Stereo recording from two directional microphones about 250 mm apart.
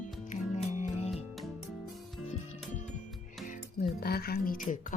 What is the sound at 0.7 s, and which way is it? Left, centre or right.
Music, left.